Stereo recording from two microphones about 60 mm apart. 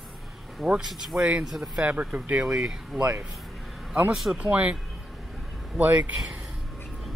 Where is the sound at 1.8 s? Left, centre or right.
Right.